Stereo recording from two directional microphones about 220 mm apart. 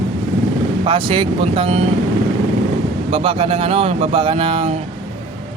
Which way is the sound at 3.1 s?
25° right (ahead or behind).